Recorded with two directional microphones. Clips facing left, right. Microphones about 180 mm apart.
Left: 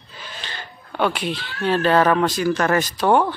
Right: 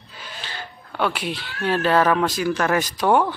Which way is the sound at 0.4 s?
5° right (ahead or behind).